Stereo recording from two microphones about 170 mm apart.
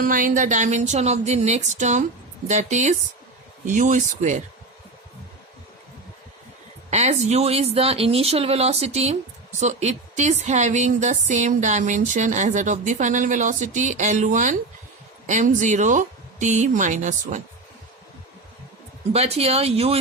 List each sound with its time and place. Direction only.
0.0 s a woman's voice: 55° right (ahead or behind)
6.9 s a woman's voice: 40° right (ahead or behind)
19.1 s speech: 35° right (ahead or behind)